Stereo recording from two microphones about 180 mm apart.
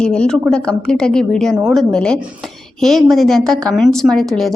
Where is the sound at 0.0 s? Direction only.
5° left (ahead or behind).